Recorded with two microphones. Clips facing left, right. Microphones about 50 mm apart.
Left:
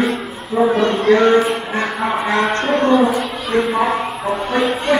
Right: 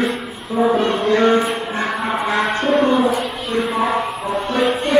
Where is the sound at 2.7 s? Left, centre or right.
Centre.